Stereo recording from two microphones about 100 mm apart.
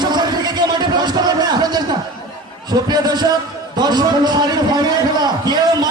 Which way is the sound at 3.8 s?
45° right (ahead or behind).